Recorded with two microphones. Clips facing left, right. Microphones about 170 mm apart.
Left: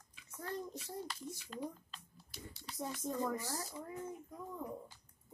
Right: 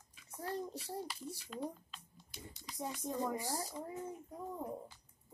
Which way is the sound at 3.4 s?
35° right (ahead or behind).